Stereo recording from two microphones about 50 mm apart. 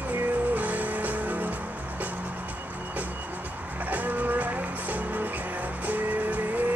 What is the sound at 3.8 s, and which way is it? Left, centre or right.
Music, right.